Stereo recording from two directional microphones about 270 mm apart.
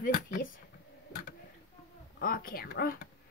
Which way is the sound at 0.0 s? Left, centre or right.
Left.